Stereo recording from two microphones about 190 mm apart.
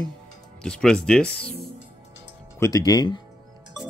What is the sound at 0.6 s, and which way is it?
Speech, 5° left (ahead or behind).